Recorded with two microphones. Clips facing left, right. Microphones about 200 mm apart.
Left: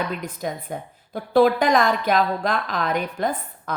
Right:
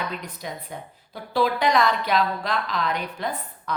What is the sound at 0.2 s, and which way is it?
A woman's voice, 50° left (ahead or behind).